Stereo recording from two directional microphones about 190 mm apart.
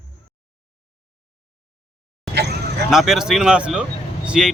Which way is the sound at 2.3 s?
60° right (ahead or behind).